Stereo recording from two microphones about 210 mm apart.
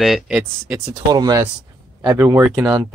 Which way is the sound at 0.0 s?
Centre (ahead or behind).